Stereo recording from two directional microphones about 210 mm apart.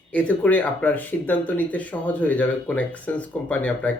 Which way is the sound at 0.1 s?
5° left (ahead or behind).